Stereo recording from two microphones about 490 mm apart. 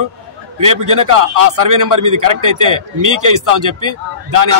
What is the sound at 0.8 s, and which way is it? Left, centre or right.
A man's voice, right.